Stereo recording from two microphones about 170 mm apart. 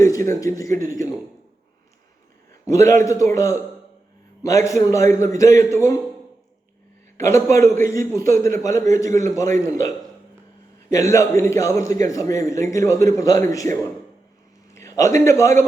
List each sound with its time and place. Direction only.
0.0 s a man's voice: 20° left (ahead or behind)
2.6 s a man's voice: 15° left (ahead or behind)
7.2 s a man's voice: 15° left (ahead or behind)
14.8 s a man's voice: 15° left (ahead or behind)